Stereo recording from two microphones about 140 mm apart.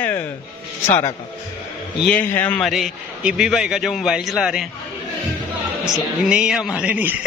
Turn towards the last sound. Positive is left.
turn(degrees=-10)  # may be behind; listen again after turning